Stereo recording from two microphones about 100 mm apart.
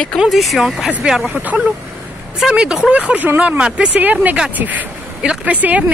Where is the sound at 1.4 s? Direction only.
15° right (ahead or behind).